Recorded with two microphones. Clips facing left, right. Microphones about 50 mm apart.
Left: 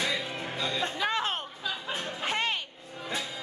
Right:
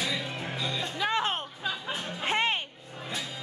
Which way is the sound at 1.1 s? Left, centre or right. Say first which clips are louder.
Right 2 dB; right.